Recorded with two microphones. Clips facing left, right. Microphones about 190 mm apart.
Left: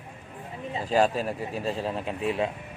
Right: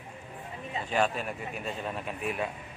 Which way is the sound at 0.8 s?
35° left (ahead or behind).